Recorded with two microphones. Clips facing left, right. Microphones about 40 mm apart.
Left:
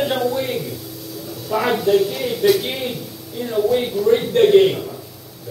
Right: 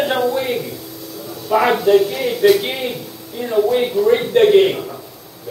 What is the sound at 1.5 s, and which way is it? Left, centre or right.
Speech, right.